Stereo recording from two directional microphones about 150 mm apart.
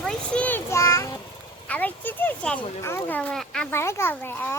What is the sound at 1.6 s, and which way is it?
A child's voice, 10° left (ahead or behind).